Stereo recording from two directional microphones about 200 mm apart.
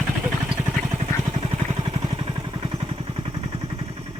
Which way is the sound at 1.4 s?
25° right (ahead or behind).